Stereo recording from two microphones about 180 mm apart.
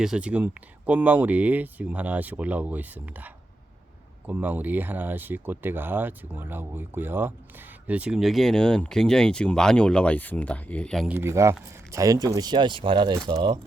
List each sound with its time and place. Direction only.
0.0 s speech: 5° right (ahead or behind)
11.1 s speech: 15° right (ahead or behind)